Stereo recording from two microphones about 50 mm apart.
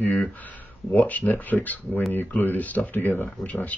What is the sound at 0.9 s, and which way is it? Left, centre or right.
Speech, left.